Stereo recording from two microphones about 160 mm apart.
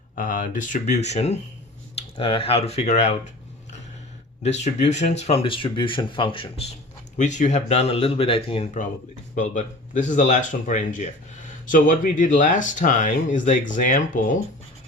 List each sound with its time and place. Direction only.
0.2 s speech: 55° left (ahead or behind)
4.6 s speech: 45° left (ahead or behind)
7.2 s speech: 50° left (ahead or behind)
9.3 s speech: 50° left (ahead or behind)